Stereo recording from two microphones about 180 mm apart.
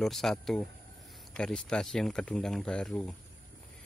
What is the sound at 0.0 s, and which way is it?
Speech, centre (ahead or behind).